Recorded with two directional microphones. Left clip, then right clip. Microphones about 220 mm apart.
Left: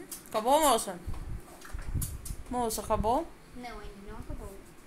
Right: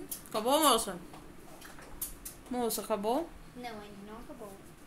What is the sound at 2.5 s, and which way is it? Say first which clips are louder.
A woman's voice: left 3 dB; 5° right (ahead or behind).